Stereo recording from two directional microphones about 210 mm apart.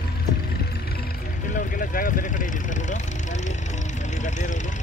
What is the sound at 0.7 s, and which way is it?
Music, 45° left (ahead or behind).